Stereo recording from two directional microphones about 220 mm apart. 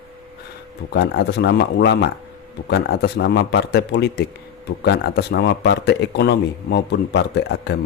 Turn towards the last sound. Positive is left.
turn(degrees=50)  # may be behind; listen again after turning